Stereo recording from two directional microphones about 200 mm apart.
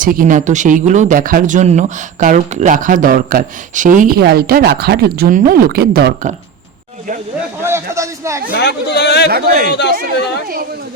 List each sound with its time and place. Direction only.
0.0 s speech: 45° right (ahead or behind)
7.6 s a sound: 15° right (ahead or behind)
8.5 s a man's voice: 55° left (ahead or behind)
9.3 s speech: 45° right (ahead or behind)
9.6 s a man's voice: 55° left (ahead or behind)